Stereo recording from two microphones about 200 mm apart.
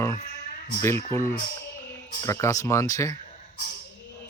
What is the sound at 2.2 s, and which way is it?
Speech, 15° left (ahead or behind).